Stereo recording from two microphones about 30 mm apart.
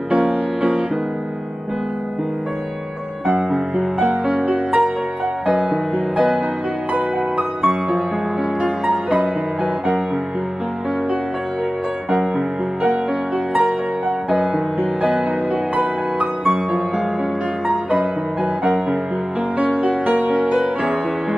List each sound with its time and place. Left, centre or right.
0.1 s music: right
3.7 s music: right
6.1 s music: right
15.7 s music: right
19.6 s music: right